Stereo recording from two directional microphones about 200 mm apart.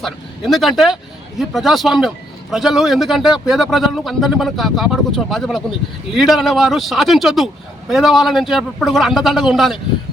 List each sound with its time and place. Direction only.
0.0 s a man's voice: centre (ahead or behind)